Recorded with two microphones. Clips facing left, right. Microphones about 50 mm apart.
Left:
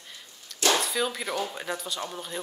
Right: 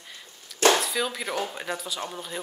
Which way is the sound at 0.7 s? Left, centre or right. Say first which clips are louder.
Even; centre.